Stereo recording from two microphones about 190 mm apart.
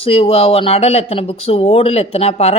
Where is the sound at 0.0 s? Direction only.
30° left (ahead or behind).